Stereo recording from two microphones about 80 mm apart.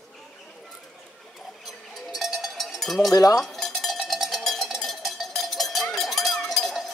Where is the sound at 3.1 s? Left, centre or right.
Left.